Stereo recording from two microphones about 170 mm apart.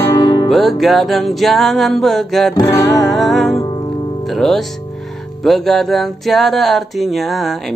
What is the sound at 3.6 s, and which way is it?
Music, 25° left (ahead or behind).